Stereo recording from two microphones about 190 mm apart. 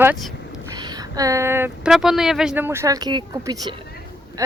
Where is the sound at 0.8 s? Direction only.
20° right (ahead or behind).